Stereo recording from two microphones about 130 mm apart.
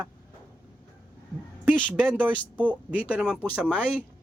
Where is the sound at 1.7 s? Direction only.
5° left (ahead or behind).